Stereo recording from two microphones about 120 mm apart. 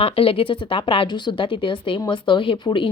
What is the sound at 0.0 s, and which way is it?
A woman's voice, 50° left (ahead or behind).